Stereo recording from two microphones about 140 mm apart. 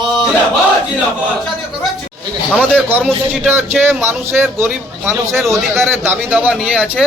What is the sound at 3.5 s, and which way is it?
A man's voice, 15° right (ahead or behind).